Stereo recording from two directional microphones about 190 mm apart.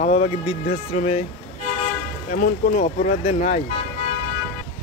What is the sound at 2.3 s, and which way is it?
Speech, 40° left (ahead or behind).